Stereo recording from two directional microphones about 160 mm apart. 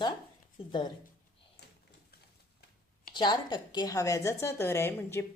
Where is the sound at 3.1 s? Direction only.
25° left (ahead or behind).